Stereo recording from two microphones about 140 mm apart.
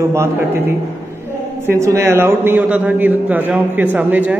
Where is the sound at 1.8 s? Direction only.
20° right (ahead or behind).